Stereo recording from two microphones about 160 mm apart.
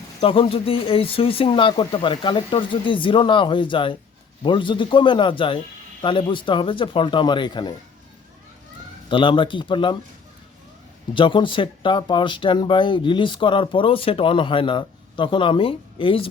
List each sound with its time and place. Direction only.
0.2 s speech: 35° left (ahead or behind)
9.0 s speech: 30° left (ahead or behind)
11.1 s speech: 30° left (ahead or behind)